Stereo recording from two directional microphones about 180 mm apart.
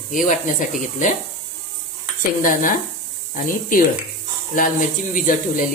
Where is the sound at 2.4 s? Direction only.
45° left (ahead or behind).